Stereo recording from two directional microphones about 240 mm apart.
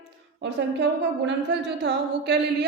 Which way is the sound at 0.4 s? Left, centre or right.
Right.